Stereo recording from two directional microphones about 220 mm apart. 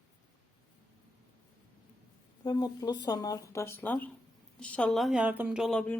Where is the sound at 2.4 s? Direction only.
20° left (ahead or behind).